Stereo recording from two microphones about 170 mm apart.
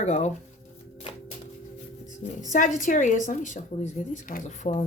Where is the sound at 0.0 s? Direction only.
40° left (ahead or behind).